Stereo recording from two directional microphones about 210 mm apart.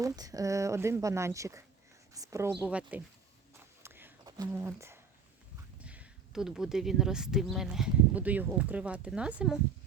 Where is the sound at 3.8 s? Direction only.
10° right (ahead or behind).